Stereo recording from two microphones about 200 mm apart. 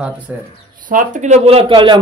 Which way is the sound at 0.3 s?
10° right (ahead or behind).